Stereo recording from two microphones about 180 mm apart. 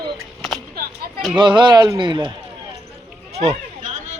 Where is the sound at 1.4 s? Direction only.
25° right (ahead or behind).